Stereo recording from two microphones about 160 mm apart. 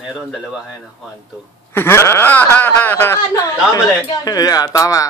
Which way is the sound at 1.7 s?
15° left (ahead or behind).